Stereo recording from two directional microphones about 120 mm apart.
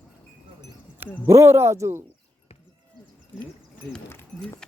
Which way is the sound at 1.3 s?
25° right (ahead or behind).